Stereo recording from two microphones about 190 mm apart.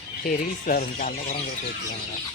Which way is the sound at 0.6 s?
45° left (ahead or behind).